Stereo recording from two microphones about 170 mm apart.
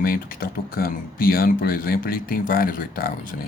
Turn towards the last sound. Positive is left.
turn(degrees=55)  # may be behind; listen again after turning